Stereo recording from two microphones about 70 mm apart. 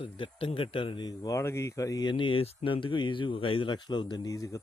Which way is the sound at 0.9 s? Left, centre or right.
Left.